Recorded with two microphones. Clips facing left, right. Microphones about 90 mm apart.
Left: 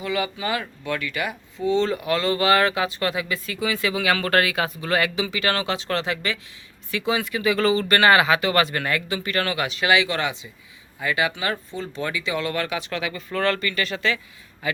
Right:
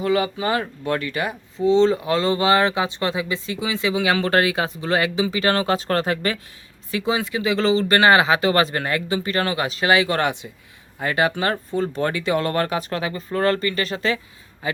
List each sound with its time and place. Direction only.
0.0 s speech: 35° right (ahead or behind)
6.9 s speech: 30° right (ahead or behind)